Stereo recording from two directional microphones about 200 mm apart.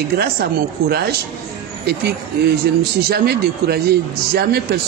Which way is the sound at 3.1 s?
50° right (ahead or behind).